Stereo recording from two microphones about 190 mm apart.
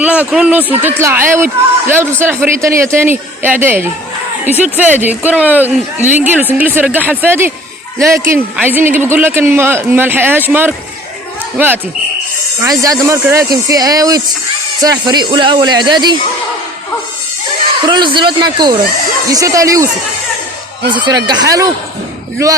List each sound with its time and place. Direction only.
0.0 s a man's voice: 5° right (ahead or behind); by 16.1 s 25° right (ahead or behind)
17.8 s a man's voice: 25° right (ahead or behind)
20.9 s a man's voice: 25° right (ahead or behind)